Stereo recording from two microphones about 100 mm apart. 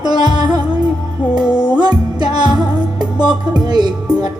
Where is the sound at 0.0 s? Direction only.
45° right (ahead or behind).